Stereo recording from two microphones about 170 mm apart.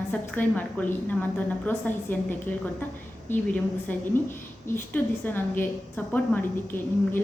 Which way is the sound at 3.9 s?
10° left (ahead or behind).